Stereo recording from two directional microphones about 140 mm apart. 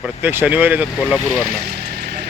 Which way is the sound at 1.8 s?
90° right.